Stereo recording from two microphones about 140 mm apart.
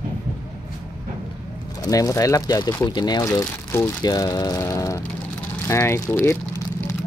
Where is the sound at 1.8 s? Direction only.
25° left (ahead or behind).